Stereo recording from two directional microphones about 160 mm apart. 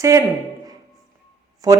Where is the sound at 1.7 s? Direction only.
25° right (ahead or behind).